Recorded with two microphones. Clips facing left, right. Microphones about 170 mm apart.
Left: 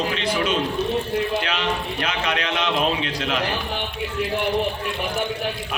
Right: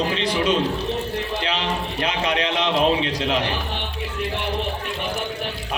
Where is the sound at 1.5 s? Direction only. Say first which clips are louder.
Even; 35° right (ahead or behind).